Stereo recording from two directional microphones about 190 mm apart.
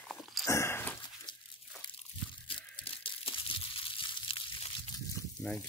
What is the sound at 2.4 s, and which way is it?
Crumpling, 30° left (ahead or behind).